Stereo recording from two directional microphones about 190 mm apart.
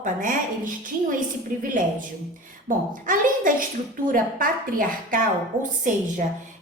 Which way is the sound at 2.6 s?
45° right (ahead or behind).